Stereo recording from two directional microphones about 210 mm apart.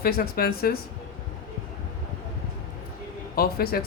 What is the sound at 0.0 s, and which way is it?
Speech, 45° left (ahead or behind).